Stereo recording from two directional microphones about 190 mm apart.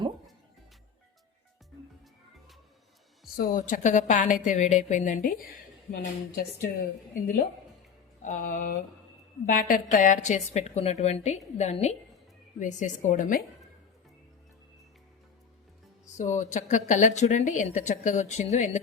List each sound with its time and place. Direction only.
3.3 s a woman's voice: 45° left (ahead or behind)
5.9 s a woman's voice: 55° left (ahead or behind)
8.2 s a woman's voice: 40° left (ahead or behind)
16.0 s a woman's voice: 40° left (ahead or behind)